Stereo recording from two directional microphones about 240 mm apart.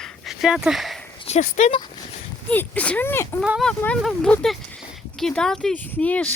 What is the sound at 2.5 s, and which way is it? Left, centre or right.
Speech, centre.